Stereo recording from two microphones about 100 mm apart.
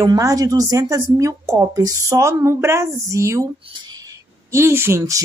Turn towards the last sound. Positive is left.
turn(degrees=-30)  # may be behind; listen again after turning